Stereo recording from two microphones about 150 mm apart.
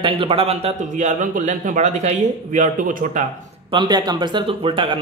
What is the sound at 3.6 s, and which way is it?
A man's voice, 30° right (ahead or behind).